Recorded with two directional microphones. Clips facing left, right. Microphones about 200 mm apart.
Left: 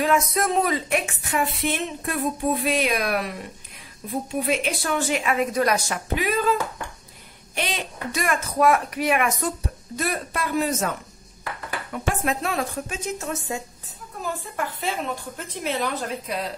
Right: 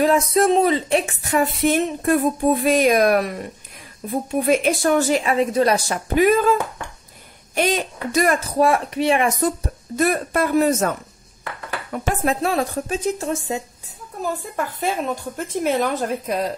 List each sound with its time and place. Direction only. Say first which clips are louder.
0.0 s speech: right 5 dB; 30° right (ahead or behind)
4.5 s speech: right 10 dB; 45° right (ahead or behind); by 5.9 s 30° right (ahead or behind)
6.1 s speech: right 8 dB; 50° right (ahead or behind)
7.5 s speech: right 8 dB; 45° right (ahead or behind); by 9.5 s 30° right (ahead or behind)
9.9 s speech: right 8 dB; 50° right (ahead or behind)
11.9 s speech: right 4 dB; 40° right (ahead or behind)
14.2 s speech: right 4 dB; 45° right (ahead or behind)